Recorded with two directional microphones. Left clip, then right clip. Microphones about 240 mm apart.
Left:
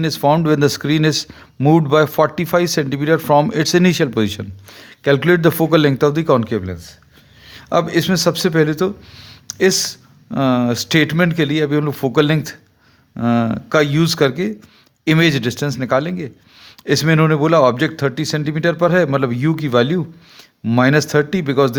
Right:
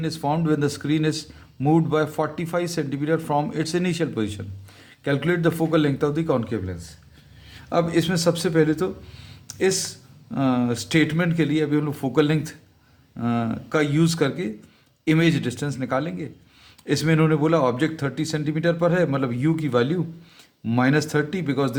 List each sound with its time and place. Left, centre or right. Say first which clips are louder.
0.0 s speech: left 10 dB; left